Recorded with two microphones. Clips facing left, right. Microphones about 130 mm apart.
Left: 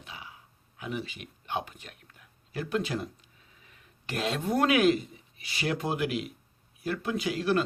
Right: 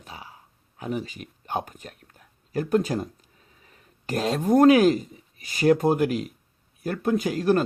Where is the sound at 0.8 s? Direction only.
40° right (ahead or behind).